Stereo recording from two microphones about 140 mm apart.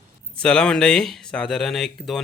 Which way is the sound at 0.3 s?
5° left (ahead or behind).